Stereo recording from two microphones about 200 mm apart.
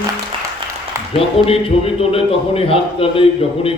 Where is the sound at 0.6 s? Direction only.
25° right (ahead or behind).